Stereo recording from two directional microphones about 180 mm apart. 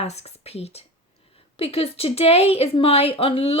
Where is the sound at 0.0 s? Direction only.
35° left (ahead or behind).